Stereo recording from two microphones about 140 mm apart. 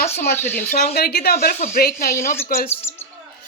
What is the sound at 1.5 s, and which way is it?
Speech, 65° left (ahead or behind).